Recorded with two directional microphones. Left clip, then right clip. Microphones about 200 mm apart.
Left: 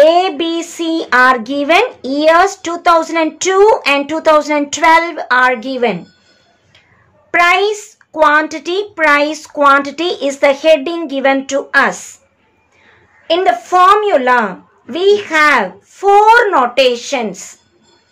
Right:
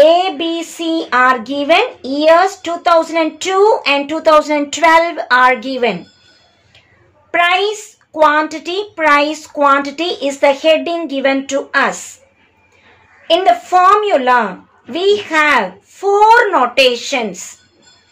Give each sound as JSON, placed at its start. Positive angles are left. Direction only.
{"t": 0.0, "sound": "a child's voice", "side_deg": 20}
{"t": 7.2, "sound": "a child's voice", "side_deg": 20}
{"t": 13.3, "sound": "a child's voice", "side_deg": 15}